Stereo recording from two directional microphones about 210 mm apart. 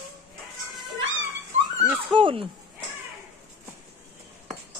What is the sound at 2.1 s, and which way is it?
Speech, 25° right (ahead or behind).